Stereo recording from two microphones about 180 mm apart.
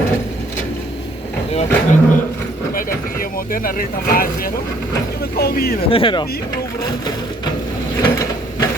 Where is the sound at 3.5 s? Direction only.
50° left (ahead or behind).